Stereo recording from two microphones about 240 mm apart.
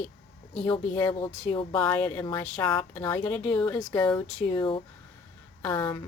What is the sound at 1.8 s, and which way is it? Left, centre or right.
Speech, centre.